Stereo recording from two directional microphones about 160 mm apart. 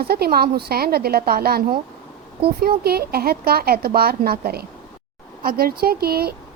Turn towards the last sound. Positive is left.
turn(degrees=-75)  # may be behind; listen again after turning